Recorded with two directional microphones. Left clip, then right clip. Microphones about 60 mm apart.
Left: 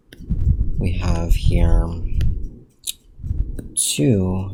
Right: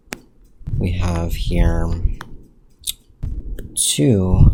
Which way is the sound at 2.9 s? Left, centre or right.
Right.